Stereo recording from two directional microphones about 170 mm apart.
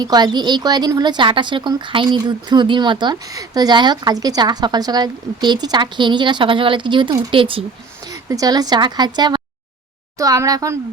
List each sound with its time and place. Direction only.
0.0 s a woman's voice: 25° right (ahead or behind)
8.0 s a woman's voice: 20° right (ahead or behind)